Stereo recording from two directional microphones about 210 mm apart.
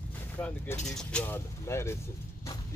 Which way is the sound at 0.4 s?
10° left (ahead or behind).